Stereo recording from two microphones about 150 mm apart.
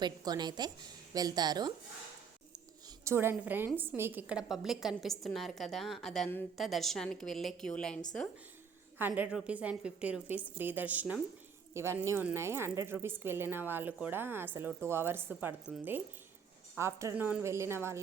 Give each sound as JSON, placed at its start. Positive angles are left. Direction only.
{"t": 0.0, "sound": "a woman's voice", "side_deg": -30}
{"t": 3.0, "sound": "a woman's voice", "side_deg": -15}
{"t": 9.0, "sound": "a woman's voice", "side_deg": -10}
{"t": 16.7, "sound": "a woman's voice", "side_deg": -20}